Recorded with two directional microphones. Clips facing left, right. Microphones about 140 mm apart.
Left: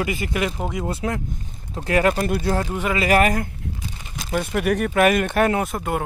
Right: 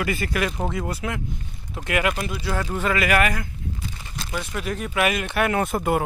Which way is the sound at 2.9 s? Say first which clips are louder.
Left 4 dB; 35° left (ahead or behind).